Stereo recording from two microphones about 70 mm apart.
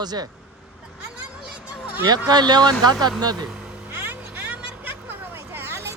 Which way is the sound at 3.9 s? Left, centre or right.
Right.